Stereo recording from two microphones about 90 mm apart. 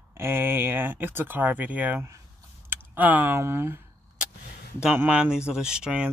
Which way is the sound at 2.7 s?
20° right (ahead or behind).